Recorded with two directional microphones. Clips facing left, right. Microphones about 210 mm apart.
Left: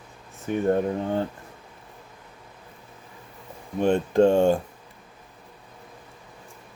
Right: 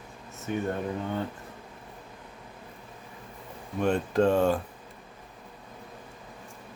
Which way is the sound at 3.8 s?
25° left (ahead or behind).